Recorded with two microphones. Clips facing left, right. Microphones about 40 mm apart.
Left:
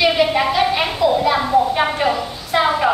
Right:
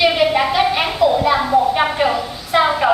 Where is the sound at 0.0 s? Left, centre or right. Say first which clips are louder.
Right 1 dB; centre.